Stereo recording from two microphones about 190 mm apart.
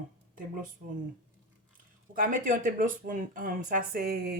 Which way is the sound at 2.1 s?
45° right (ahead or behind).